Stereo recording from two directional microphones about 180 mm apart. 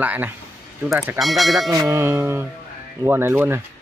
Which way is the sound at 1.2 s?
Centre (ahead or behind).